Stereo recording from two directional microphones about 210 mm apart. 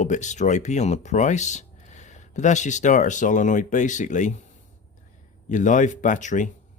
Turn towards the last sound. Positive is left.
turn(degrees=35)  # may be behind; listen again after turning